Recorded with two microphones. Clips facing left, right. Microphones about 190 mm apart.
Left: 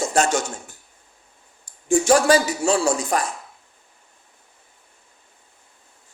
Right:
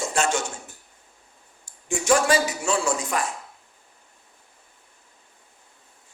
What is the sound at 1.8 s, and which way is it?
Speech, 35° left (ahead or behind).